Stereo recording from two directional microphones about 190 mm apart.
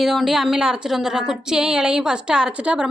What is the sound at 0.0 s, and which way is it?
A woman's voice, centre (ahead or behind).